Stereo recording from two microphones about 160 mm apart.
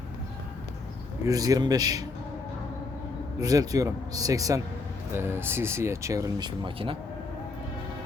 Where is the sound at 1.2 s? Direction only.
20° right (ahead or behind).